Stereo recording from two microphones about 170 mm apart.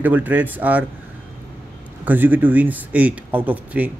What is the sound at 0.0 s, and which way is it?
Speech, 10° right (ahead or behind).